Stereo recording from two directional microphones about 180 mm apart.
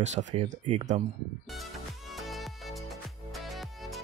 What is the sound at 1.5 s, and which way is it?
Music, centre (ahead or behind).